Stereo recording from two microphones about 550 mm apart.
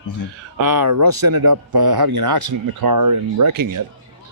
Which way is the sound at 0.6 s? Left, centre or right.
Right.